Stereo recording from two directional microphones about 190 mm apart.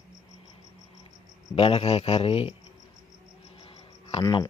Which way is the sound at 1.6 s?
30° left (ahead or behind).